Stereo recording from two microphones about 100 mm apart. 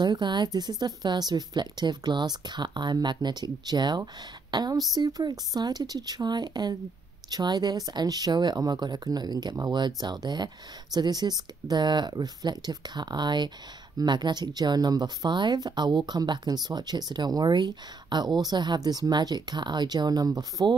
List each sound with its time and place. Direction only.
0.0 s speech: 45° right (ahead or behind)